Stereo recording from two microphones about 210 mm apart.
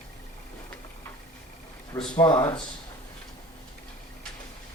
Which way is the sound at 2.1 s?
20° left (ahead or behind).